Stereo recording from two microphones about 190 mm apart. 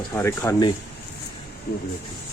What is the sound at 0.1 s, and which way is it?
Speech, 15° left (ahead or behind).